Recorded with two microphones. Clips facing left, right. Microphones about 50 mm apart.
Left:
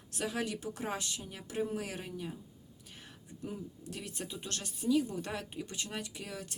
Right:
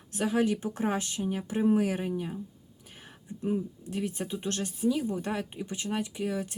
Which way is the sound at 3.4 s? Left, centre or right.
Right.